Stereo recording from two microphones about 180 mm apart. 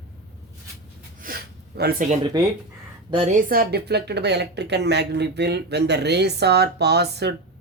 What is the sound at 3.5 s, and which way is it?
Speech, 60° right (ahead or behind).